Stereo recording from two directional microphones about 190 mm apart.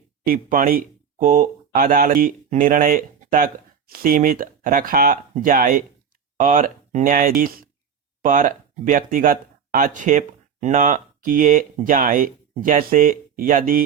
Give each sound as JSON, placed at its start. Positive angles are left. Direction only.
{"t": 0.3, "sound": "speech", "side_deg": -50}